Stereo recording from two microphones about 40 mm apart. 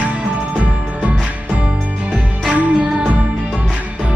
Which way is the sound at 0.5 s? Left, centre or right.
Right.